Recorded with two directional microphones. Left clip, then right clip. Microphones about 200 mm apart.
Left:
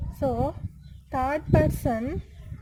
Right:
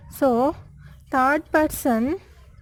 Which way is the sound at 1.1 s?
30° right (ahead or behind).